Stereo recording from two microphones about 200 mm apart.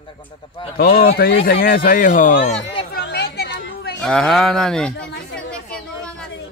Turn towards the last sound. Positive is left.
turn(degrees=5)  # may be behind; listen again after turning